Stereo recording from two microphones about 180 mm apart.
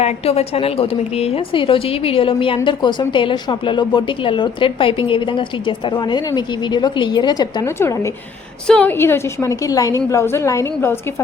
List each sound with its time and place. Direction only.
0.0 s a woman's voice: 35° left (ahead or behind); by 10.9 s 15° left (ahead or behind)